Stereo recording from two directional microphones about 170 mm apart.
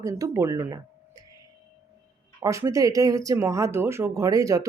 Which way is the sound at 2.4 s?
20° right (ahead or behind).